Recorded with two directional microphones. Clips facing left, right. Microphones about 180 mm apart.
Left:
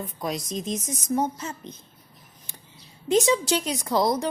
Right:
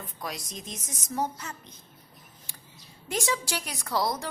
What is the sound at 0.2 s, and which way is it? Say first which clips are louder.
A woman's voice: left 8 dB; 20° left (ahead or behind).